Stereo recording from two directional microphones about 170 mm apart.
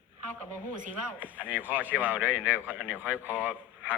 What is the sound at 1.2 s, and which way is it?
A man's voice, 10° right (ahead or behind).